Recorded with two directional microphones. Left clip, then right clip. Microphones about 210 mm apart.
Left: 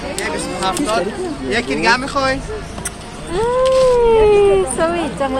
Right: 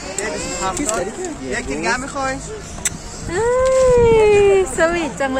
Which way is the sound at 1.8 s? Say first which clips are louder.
Left 6 dB; 15° left (ahead or behind).